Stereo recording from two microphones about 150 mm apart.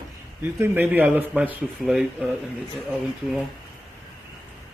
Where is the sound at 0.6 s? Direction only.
15° right (ahead or behind).